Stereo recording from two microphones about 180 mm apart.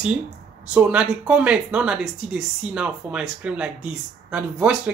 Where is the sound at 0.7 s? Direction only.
5° right (ahead or behind).